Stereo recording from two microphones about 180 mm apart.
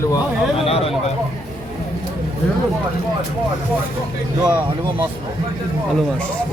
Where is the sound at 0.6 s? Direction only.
35° left (ahead or behind).